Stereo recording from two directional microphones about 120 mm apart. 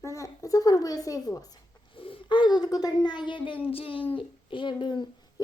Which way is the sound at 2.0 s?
45° left (ahead or behind).